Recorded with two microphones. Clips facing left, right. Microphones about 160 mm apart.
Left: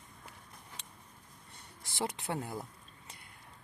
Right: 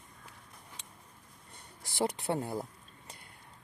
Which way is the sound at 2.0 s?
35° right (ahead or behind).